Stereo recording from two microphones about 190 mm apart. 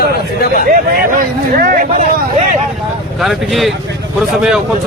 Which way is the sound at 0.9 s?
50° right (ahead or behind).